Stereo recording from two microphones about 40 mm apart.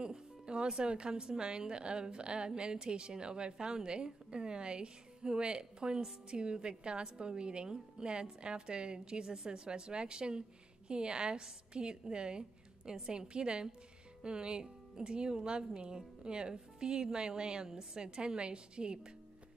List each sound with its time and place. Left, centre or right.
0.0 s a woman's voice: right